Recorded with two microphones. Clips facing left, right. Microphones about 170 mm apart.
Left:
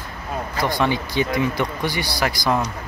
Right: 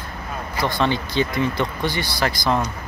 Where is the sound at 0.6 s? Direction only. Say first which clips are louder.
Even; 10° left (ahead or behind).